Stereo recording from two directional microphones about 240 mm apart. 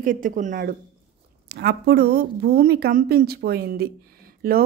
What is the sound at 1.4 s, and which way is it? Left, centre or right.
Speech, right.